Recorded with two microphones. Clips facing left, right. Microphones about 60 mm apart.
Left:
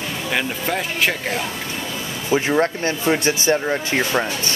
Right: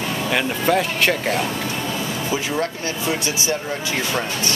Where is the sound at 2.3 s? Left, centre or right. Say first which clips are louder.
Left 8 dB; left.